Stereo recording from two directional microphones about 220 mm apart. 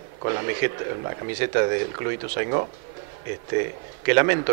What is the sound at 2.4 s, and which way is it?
Speech, 25° right (ahead or behind).